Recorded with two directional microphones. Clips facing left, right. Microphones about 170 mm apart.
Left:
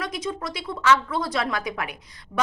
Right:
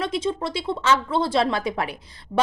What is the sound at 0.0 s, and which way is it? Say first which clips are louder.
Speech: right 5 dB; 25° right (ahead or behind).